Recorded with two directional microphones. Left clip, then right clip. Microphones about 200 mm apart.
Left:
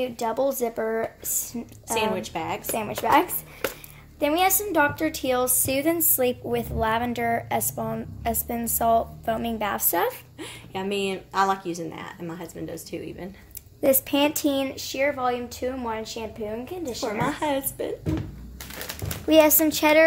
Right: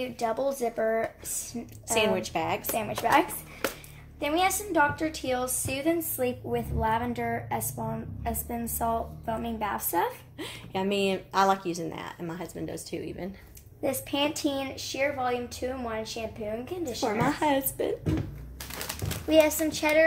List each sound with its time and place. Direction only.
0.0 s a woman's voice: 40° left (ahead or behind)
2.0 s speech: 10° right (ahead or behind)
2.7 s a woman's voice: 45° left (ahead or behind)
4.2 s a woman's voice: 55° left (ahead or behind)
10.4 s speech: 10° right (ahead or behind)
13.8 s a woman's voice: 55° left (ahead or behind); by 16.7 s 35° left (ahead or behind)
17.0 s speech: 10° right (ahead or behind)
19.2 s speech: 55° left (ahead or behind)